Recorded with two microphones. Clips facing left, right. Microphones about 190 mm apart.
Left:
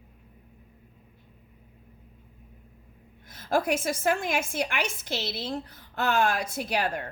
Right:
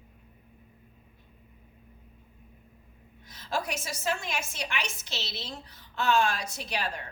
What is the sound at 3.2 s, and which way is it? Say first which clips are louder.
A woman's voice: left 7 dB; 55° left (ahead or behind).